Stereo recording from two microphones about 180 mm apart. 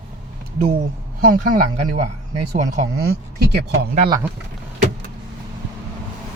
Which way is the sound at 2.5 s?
40° right (ahead or behind).